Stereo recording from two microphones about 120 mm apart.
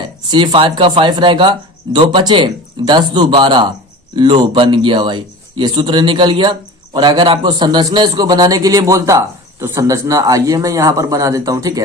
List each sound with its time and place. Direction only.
0.3 s speech: 40° right (ahead or behind)